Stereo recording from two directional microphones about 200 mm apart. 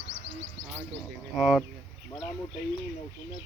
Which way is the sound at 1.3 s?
5° right (ahead or behind).